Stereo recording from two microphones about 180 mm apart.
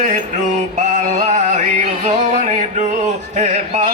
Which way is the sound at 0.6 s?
40° right (ahead or behind).